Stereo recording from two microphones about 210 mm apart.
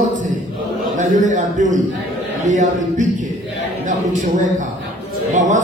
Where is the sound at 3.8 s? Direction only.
35° right (ahead or behind).